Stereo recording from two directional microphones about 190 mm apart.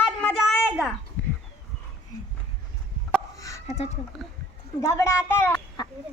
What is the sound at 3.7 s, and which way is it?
Speech, 35° left (ahead or behind).